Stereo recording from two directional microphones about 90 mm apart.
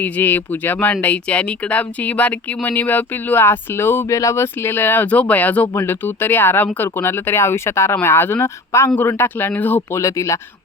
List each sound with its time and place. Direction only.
0.0 s speech: 20° left (ahead or behind)
10.0 s speech: 35° left (ahead or behind)